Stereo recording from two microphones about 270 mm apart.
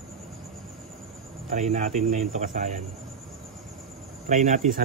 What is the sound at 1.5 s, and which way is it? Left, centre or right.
Speech, right.